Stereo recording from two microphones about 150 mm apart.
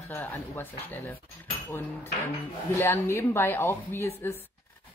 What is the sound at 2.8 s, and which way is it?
Speech, 15° left (ahead or behind).